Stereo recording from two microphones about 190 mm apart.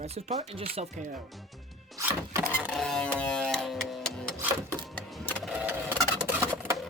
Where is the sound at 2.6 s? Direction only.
Centre (ahead or behind).